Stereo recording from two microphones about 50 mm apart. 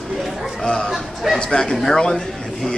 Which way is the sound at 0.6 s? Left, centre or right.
Centre.